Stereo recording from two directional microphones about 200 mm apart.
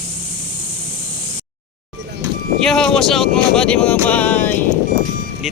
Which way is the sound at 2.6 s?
5° left (ahead or behind).